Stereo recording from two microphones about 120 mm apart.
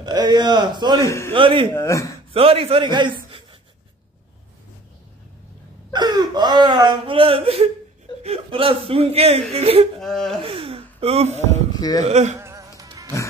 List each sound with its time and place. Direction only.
0.0 s speech: 35° right (ahead or behind)
1.0 s a man's voice: 20° left (ahead or behind)
1.3 s speech: 45° right (ahead or behind)
1.7 s a man's voice: 25° left (ahead or behind)
2.3 s a man's voice: 50° right (ahead or behind)
5.9 s speech: 35° right (ahead or behind); by 9.8 s 55° right (ahead or behind)
9.9 s speech: centre (ahead or behind)
10.4 s speech: 50° right (ahead or behind)
12.0 s speech: 75° right (ahead or behind)
12.4 s music: 25° right (ahead or behind)